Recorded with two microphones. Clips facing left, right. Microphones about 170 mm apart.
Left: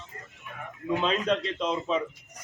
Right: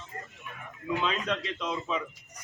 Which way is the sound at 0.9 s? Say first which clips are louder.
Left 4 dB; 35° left (ahead or behind).